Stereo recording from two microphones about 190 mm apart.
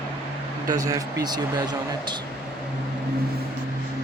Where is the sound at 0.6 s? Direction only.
20° right (ahead or behind).